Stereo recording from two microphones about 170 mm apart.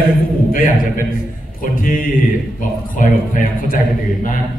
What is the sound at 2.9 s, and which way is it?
Speech, 50° left (ahead or behind).